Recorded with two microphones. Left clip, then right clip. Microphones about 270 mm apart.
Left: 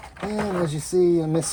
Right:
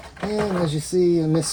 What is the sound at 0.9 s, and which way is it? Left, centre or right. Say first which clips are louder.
Speech: even; centre.